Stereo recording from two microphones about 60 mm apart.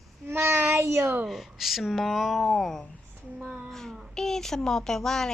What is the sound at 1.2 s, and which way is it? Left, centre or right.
Speech, centre.